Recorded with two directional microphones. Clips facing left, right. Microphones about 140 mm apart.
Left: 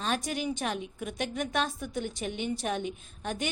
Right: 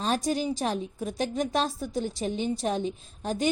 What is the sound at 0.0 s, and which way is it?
A woman's voice, 35° right (ahead or behind).